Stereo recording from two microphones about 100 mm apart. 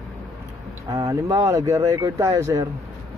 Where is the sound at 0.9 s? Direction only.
35° right (ahead or behind).